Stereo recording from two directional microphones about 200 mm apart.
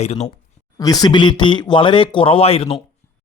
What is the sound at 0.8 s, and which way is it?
Speech, 20° left (ahead or behind).